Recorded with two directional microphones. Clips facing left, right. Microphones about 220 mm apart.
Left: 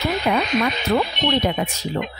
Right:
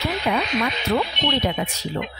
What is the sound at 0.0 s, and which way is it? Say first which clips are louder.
Speech: left 3 dB; 45° left (ahead or behind).